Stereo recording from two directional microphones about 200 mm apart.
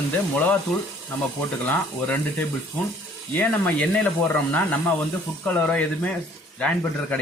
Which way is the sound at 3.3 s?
10° left (ahead or behind).